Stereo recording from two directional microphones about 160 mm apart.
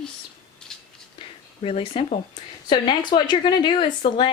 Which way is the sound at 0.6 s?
5° left (ahead or behind).